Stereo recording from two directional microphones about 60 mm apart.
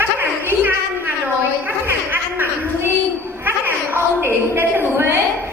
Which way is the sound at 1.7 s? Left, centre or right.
Right.